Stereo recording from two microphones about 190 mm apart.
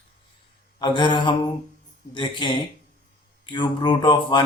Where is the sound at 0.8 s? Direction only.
25° left (ahead or behind).